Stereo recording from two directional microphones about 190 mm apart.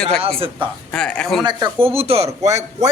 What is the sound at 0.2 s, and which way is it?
Speech, 30° right (ahead or behind).